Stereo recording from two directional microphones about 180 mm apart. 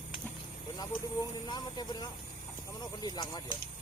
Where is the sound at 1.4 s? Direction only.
25° left (ahead or behind).